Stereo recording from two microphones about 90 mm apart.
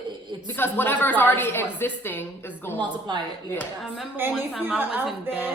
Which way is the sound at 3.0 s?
50° right (ahead or behind).